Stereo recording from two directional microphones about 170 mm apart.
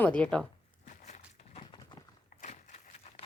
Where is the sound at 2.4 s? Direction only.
40° left (ahead or behind).